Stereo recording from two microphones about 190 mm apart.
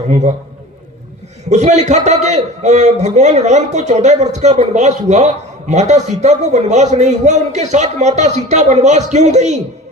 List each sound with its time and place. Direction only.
1.5 s a man's voice: 35° right (ahead or behind)